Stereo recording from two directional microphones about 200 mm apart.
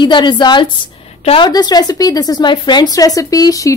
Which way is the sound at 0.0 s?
25° left (ahead or behind).